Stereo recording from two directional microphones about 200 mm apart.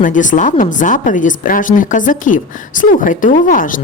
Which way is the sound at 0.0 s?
40° left (ahead or behind).